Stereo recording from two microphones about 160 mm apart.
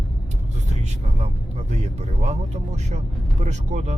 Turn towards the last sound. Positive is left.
turn(degrees=-45)  # may be behind; listen again after turning